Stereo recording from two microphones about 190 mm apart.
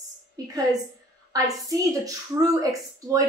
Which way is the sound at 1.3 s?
20° right (ahead or behind).